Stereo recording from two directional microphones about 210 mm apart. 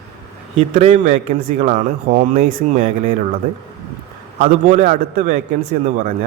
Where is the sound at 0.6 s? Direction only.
30° right (ahead or behind).